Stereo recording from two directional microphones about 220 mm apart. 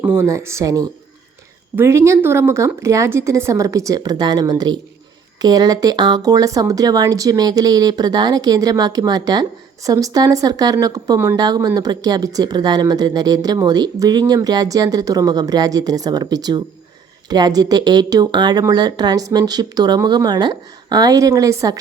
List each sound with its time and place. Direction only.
0.2 s speech: 10° right (ahead or behind)